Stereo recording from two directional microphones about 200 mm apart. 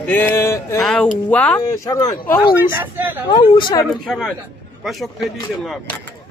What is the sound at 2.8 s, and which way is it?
Speech, 10° right (ahead or behind).